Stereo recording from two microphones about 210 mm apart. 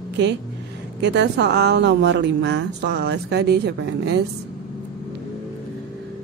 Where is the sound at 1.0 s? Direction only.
55° right (ahead or behind).